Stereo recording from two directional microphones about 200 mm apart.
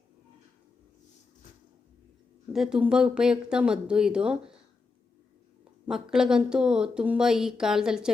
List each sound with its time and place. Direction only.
2.5 s a woman's voice: centre (ahead or behind)
5.9 s a woman's voice: 5° right (ahead or behind)